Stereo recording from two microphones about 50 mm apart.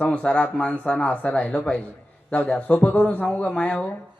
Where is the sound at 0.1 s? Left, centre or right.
Left.